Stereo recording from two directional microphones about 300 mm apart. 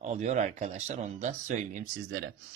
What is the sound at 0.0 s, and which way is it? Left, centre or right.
Speech, right.